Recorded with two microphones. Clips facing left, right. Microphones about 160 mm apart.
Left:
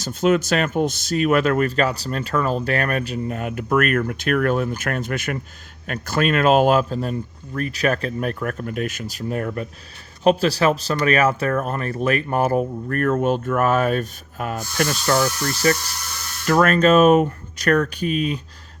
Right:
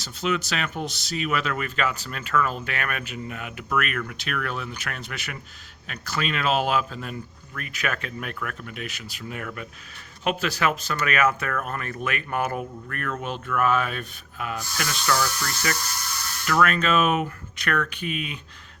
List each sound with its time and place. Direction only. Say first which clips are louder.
0.0 s speech: left 8 dB; 45° left (ahead or behind)